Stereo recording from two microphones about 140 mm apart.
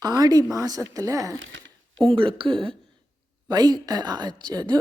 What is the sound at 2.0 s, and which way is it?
Speech, 40° right (ahead or behind).